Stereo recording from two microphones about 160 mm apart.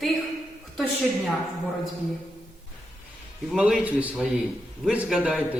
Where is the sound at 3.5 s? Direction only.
5° right (ahead or behind).